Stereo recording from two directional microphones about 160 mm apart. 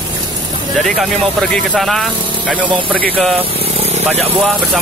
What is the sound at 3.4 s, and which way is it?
Vehicle, 40° right (ahead or behind).